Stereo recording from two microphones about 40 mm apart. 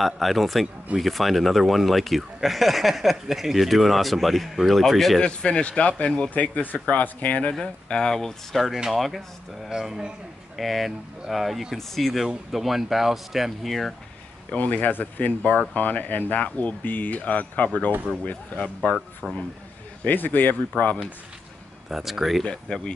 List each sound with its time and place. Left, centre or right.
0.0 s speech: centre
5.2 s speech: left
6.3 s speech: left
7.6 s speech: centre
9.7 s speech: centre
10.5 s speech: centre
12.3 s speech: centre
14.6 s speech: left
19.2 s speech: centre
20.1 s speech: left
20.7 s speech: left
21.8 s speech: centre
22.4 s speech: left